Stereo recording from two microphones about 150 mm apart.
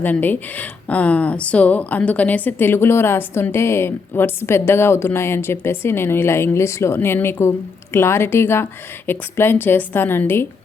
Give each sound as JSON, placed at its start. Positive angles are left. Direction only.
{"t": 0.0, "sound": "speech", "side_deg": 10}